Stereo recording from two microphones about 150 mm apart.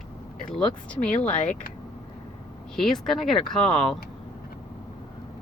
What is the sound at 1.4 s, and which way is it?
Speech, 55° left (ahead or behind).